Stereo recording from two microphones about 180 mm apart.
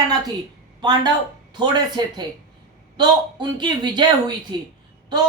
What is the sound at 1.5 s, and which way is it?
A woman's voice, 25° right (ahead or behind).